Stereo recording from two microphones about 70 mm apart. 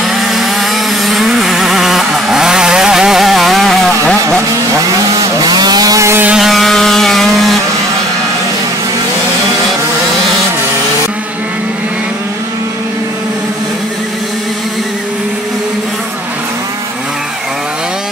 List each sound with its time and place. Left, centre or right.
0.3 s vehicle: centre
5.4 s chainsaw: right
6.3 s vehicle: centre